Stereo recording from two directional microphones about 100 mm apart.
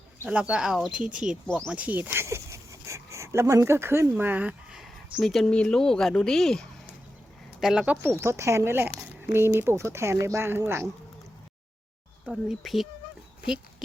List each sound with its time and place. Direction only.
0.3 s speech: 10° right (ahead or behind)
5.2 s speech: 5° left (ahead or behind)
8.0 s speech: 30° right (ahead or behind)
12.2 s speech: 5° right (ahead or behind)